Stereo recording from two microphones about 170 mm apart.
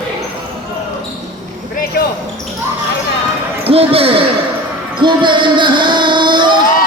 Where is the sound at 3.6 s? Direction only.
35° right (ahead or behind).